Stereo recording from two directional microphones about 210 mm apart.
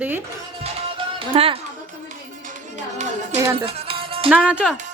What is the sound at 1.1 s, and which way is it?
Speech, 25° right (ahead or behind).